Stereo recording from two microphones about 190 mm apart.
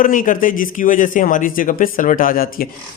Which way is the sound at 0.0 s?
45° left (ahead or behind).